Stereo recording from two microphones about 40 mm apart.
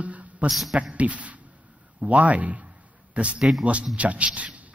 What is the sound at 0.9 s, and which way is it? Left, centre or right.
A man's voice, right.